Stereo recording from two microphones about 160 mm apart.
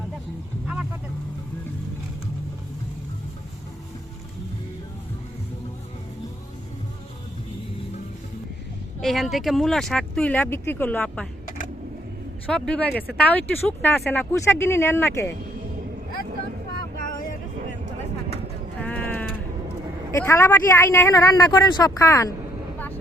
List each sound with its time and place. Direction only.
9.0 s speech: centre (ahead or behind)
12.5 s a woman's voice: 5° left (ahead or behind)
18.8 s sheep: 10° left (ahead or behind)
19.6 s a woman's voice: 15° left (ahead or behind)